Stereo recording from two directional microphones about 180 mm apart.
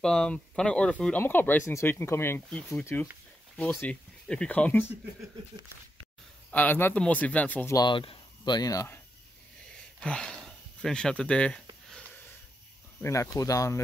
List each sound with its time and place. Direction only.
0.0 s speech: 5° left (ahead or behind)
6.5 s speech: 10° left (ahead or behind)
7.7 s speech: 25° left (ahead or behind)
9.9 s speech: 5° left (ahead or behind)
13.0 s speech: 15° left (ahead or behind)